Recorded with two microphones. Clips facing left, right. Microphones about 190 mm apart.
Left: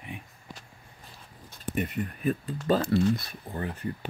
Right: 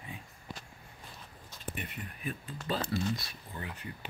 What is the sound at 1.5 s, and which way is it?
Speech, 45° left (ahead or behind).